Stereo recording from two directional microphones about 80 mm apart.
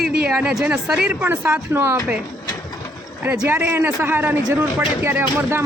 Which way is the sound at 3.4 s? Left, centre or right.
Right.